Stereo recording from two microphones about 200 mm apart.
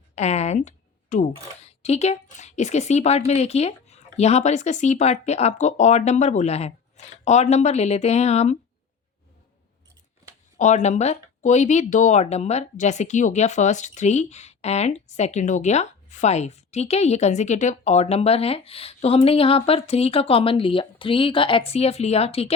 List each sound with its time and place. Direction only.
0.2 s a woman's voice: 35° left (ahead or behind)
10.6 s a woman's voice: 35° left (ahead or behind)